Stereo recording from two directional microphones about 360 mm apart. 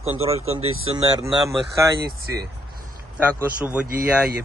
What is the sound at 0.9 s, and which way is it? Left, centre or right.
Speech, centre.